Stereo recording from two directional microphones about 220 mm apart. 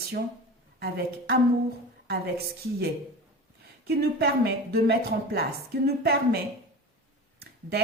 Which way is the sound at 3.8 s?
45° right (ahead or behind).